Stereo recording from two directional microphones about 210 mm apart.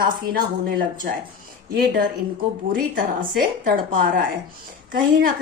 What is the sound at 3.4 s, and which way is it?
Speech, 45° right (ahead or behind).